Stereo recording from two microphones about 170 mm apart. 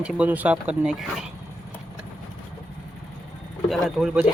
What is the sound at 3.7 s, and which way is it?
Speech, centre (ahead or behind).